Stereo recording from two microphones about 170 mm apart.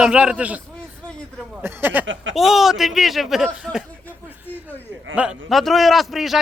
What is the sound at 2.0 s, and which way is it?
Speech, 90° right.